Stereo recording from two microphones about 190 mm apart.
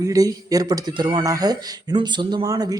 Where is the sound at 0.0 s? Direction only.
20° right (ahead or behind).